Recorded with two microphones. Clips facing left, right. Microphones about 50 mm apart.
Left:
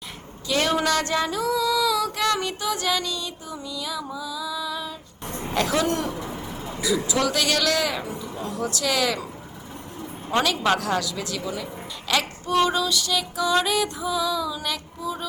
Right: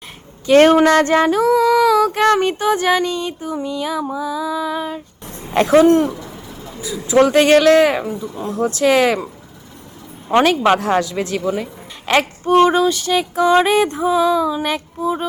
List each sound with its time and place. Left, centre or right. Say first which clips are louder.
0.4 s female singing: right 13 dB; right
5.3 s a sound: left 1 dB; left
5.5 s female singing: right 12 dB; right
6.1 s a sound: left 1 dB; centre
7.1 s female singing: right 17 dB; right
10.3 s female singing: right 8 dB; right